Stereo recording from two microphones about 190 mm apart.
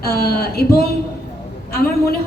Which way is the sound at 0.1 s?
55° left (ahead or behind).